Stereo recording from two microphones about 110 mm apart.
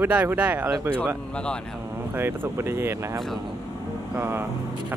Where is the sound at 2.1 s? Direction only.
20° right (ahead or behind).